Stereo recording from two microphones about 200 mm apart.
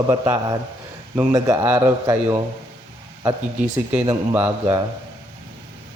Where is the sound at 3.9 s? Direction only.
10° right (ahead or behind).